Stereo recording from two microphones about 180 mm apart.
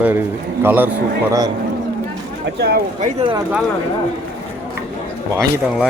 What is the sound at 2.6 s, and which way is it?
Speech, 60° right (ahead or behind).